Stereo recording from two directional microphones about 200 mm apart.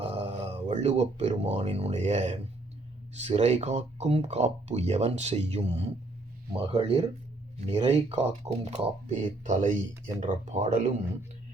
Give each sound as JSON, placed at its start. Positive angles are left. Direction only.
{"t": 0.0, "sound": "speech", "side_deg": -30}